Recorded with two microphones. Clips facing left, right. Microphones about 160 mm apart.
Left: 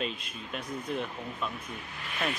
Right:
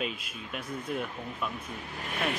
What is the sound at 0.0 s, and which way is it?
Speech, 5° right (ahead or behind).